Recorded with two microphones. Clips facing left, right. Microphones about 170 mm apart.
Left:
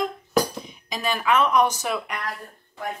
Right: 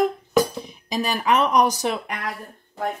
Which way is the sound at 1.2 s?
40° right (ahead or behind).